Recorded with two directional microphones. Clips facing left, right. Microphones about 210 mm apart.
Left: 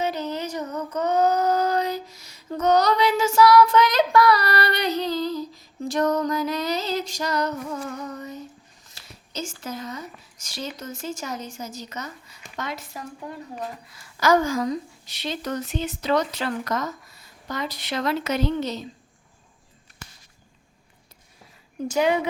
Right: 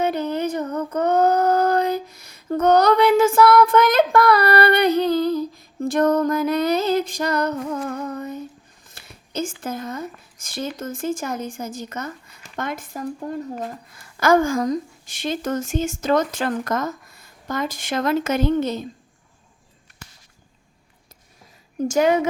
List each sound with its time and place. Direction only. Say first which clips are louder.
0.0 s child singing: right 5 dB; 55° right (ahead or behind)
8.9 s a woman's voice: right 7 dB; 55° right (ahead or behind)
21.8 s a woman's voice: right 4 dB; 45° right (ahead or behind)